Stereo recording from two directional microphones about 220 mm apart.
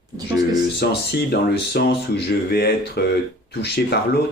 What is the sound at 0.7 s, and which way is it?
Speech, 45° left (ahead or behind).